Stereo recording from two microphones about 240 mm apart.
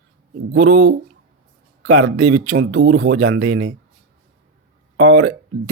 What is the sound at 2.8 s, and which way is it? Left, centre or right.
Speech, right.